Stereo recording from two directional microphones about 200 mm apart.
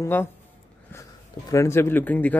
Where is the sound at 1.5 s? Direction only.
15° left (ahead or behind).